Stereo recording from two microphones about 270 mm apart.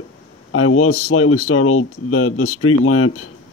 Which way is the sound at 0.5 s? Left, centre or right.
Left.